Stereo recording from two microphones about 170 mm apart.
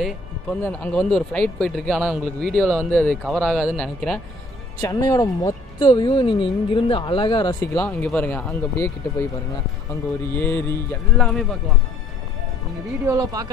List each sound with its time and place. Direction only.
0.0 s speech: 5° left (ahead or behind)
4.8 s speech: 20° left (ahead or behind)
7.7 s speech: 5° left (ahead or behind)
10.3 s speech: 10° left (ahead or behind)
11.1 s speech: centre (ahead or behind)
13.0 s speech: 20° right (ahead or behind)